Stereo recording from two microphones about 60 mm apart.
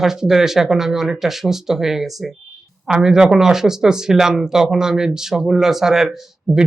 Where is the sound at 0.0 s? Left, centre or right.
Centre.